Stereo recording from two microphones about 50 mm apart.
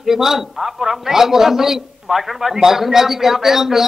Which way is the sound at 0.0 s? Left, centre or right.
Centre.